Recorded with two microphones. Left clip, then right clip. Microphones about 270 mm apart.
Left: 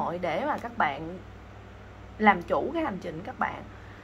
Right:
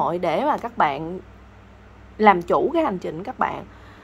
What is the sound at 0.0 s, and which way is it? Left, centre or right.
A woman's voice, right.